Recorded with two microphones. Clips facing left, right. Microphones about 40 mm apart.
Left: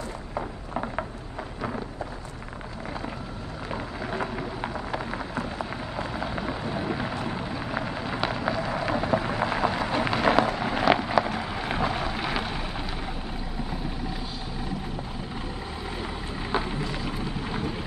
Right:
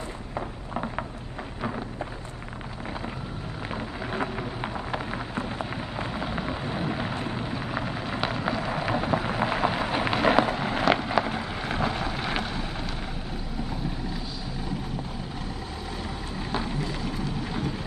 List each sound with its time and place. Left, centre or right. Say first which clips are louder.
0.3 s a sound: left 1 dB; centre
4.1 s rain: even; centre
5.3 s rain on surface: even; right
6.1 s thunder: even; centre
7.2 s rain on surface: even; centre
11.4 s boat: left 1 dB; centre
16.3 s boat: left 2 dB; centre
16.8 s vehicle: even; left
17.1 s vehicle: even; centre